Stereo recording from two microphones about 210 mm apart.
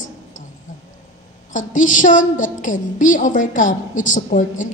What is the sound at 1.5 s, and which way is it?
A woman's voice, 40° left (ahead or behind).